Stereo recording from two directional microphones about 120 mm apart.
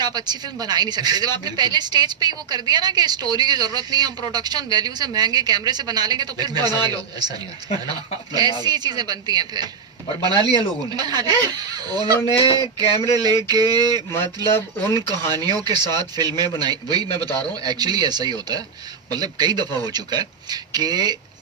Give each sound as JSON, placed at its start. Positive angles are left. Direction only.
{"t": 0.0, "sound": "speech", "side_deg": -35}
{"t": 12.3, "sound": "a sound", "side_deg": 50}
{"t": 13.0, "sound": "speech", "side_deg": -35}
{"t": 14.5, "sound": "speech", "side_deg": 20}
{"t": 15.3, "sound": "speech", "side_deg": -35}